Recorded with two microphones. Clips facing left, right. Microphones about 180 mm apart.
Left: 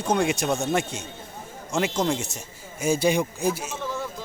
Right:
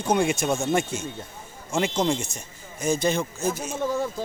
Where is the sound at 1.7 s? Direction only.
Centre (ahead or behind).